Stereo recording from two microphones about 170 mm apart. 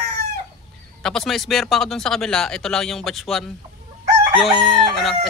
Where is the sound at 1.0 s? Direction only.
Centre (ahead or behind).